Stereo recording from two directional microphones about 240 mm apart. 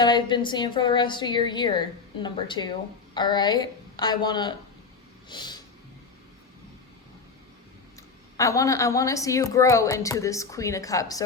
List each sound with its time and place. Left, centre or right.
0.0 s a woman's voice: centre
8.4 s a woman's voice: centre